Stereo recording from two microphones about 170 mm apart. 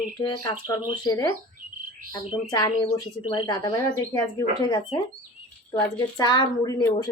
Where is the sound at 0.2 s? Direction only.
25° left (ahead or behind).